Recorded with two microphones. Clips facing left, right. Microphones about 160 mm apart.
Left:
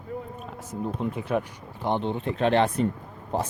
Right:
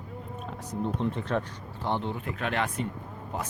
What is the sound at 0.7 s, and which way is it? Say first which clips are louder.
Speech: even; 5° left (ahead or behind).